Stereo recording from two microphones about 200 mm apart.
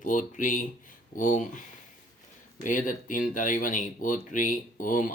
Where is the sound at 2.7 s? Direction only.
40° left (ahead or behind).